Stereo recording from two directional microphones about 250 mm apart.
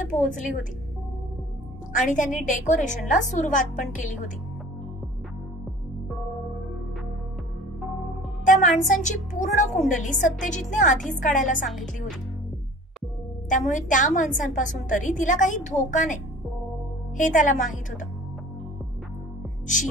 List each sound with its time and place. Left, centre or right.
0.1 s a woman's voice: left
1.9 s a woman's voice: left
8.5 s a woman's voice: left
13.5 s a woman's voice: left
17.2 s a woman's voice: left